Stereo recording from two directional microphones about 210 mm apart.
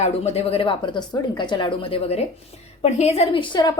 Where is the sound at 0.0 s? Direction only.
30° left (ahead or behind).